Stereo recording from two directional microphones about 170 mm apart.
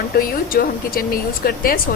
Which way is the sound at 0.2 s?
60° left (ahead or behind).